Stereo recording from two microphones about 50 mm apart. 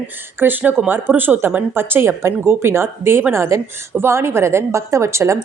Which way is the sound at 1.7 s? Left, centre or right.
Right.